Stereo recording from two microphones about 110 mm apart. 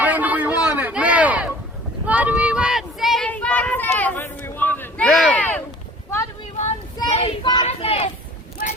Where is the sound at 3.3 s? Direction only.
15° left (ahead or behind).